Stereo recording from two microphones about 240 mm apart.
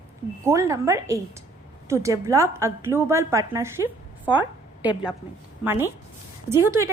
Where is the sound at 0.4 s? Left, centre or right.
Centre.